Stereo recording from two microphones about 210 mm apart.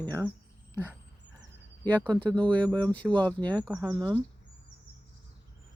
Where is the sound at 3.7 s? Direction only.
10° right (ahead or behind).